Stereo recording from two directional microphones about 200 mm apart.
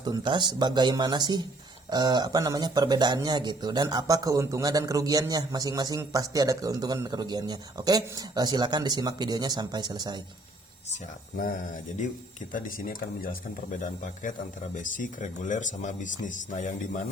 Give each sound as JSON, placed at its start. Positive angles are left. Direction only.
{"t": 0.0, "sound": "speech", "side_deg": -20}
{"t": 12.5, "sound": "speech", "side_deg": 45}